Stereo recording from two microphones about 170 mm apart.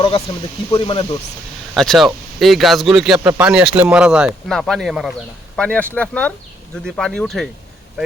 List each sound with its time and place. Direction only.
0.7 s speech: 30° left (ahead or behind)
1.7 s speech: centre (ahead or behind)